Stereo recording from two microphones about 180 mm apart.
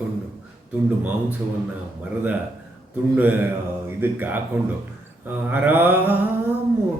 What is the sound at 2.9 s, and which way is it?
Mantra, 10° right (ahead or behind).